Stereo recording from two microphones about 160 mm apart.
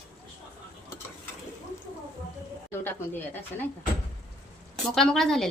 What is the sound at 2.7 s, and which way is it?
Speech, 15° left (ahead or behind).